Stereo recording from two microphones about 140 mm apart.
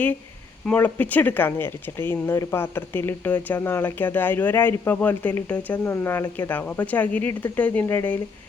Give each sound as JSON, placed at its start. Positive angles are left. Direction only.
{"t": 0.6, "sound": "speech", "side_deg": 10}